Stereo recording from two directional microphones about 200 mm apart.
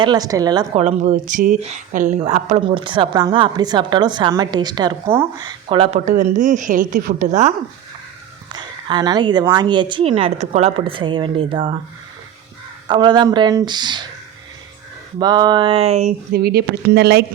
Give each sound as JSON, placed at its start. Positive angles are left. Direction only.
{"t": 0.0, "sound": "a woman's voice", "side_deg": -20}
{"t": 0.8, "sound": "a woman's voice", "side_deg": -35}
{"t": 5.6, "sound": "a woman's voice", "side_deg": -30}
{"t": 6.1, "sound": "a woman's voice", "side_deg": -40}
{"t": 8.5, "sound": "a woman's voice", "side_deg": -20}
{"t": 12.9, "sound": "a woman's voice", "side_deg": -20}
{"t": 15.2, "sound": "a woman's voice", "side_deg": -20}
{"t": 16.3, "sound": "speech", "side_deg": -50}